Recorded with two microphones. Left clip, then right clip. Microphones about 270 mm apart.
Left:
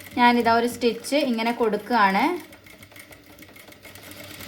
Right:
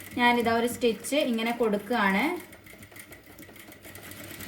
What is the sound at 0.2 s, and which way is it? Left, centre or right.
A woman's voice, left.